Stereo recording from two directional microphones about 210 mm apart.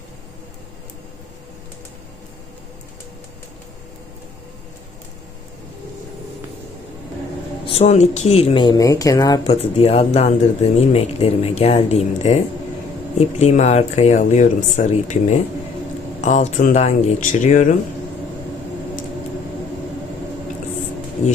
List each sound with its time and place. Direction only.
7.7 s speech: 30° left (ahead or behind)
9.6 s speech: 30° left (ahead or behind)